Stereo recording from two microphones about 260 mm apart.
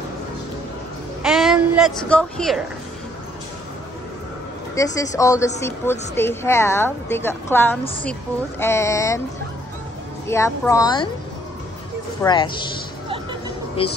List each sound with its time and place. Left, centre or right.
1.2 s speech: centre
4.7 s a woman's voice: centre
10.2 s a woman's voice: centre
12.2 s a woman's voice: centre
13.8 s speech: left